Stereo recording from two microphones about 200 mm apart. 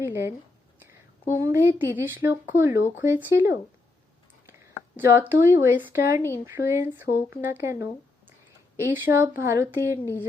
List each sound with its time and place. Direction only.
0.0 s speech: 15° right (ahead or behind)
1.4 s speech: 10° right (ahead or behind)
4.9 s speech: 10° right (ahead or behind)
8.9 s speech: 10° right (ahead or behind)